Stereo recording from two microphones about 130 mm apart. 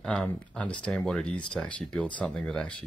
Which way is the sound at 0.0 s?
5° left (ahead or behind).